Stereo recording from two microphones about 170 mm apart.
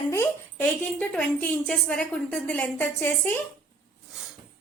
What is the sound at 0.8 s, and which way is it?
A woman's voice, 5° left (ahead or behind).